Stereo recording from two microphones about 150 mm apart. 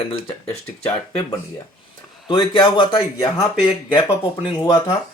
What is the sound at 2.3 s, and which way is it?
Speech, 30° left (ahead or behind).